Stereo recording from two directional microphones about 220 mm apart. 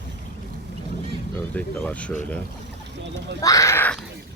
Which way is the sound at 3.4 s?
15° left (ahead or behind).